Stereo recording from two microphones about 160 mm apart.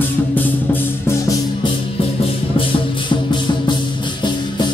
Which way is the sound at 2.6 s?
30° left (ahead or behind).